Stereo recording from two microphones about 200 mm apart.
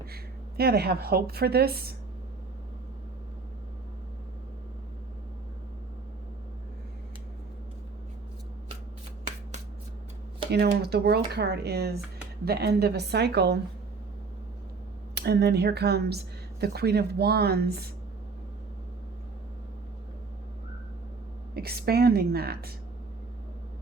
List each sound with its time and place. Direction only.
0.0 s a woman's voice: 50° right (ahead or behind)
10.5 s a woman's voice: 55° right (ahead or behind)
15.1 s speech: 55° right (ahead or behind)
21.5 s speech: 50° right (ahead or behind)